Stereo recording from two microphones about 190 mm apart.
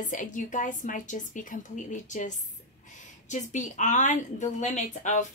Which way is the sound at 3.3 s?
40° left (ahead or behind).